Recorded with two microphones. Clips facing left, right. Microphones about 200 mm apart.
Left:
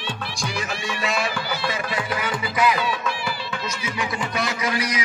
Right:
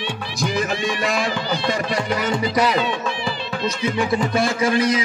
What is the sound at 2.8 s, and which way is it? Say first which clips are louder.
Speech: right 3 dB; 25° right (ahead or behind).